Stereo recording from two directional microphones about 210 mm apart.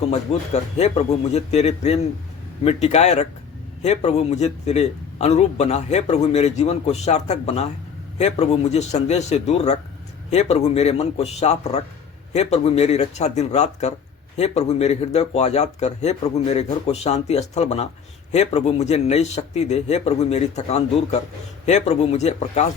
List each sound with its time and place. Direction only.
0.0 s a man's voice: 30° left (ahead or behind)